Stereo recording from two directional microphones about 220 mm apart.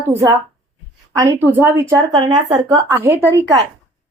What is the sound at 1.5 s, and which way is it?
A woman's voice, 10° right (ahead or behind).